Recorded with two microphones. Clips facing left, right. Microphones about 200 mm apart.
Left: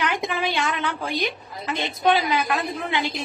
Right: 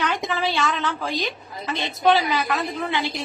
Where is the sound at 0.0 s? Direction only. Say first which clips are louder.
Even; 15° left (ahead or behind).